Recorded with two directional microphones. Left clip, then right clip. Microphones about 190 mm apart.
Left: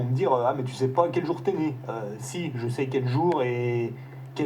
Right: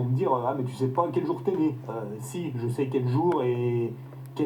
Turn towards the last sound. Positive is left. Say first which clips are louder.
# even
turn(degrees=20)  # may be behind; listen again after turning